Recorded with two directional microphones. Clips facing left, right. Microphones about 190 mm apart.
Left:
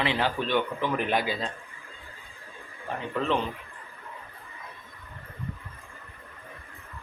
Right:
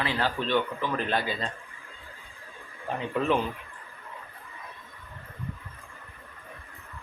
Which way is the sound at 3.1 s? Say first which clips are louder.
Right 2 dB; 10° right (ahead or behind).